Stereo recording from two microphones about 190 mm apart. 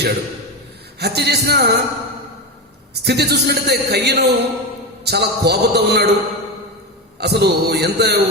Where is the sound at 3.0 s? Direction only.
60° right (ahead or behind).